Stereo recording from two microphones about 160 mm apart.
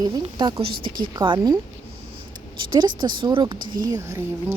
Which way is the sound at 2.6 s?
25° right (ahead or behind).